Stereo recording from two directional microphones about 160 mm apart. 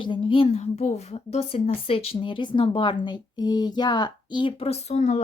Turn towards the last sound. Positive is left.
turn(degrees=45)  # may be behind; listen again after turning